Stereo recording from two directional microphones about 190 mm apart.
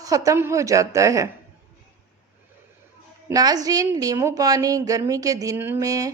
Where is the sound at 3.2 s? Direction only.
20° right (ahead or behind).